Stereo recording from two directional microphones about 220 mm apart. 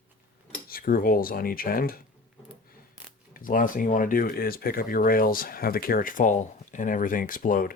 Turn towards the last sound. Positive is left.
turn(degrees=40)  # may be behind; listen again after turning